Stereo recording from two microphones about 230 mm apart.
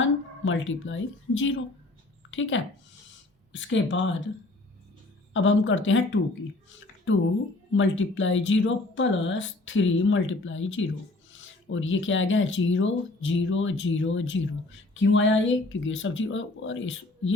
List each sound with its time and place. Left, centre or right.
0.0 s a woman's voice: left
5.3 s speech: left
6.7 s a sound: left
7.7 s speech: left